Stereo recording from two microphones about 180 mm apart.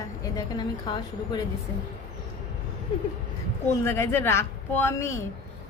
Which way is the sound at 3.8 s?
15° left (ahead or behind).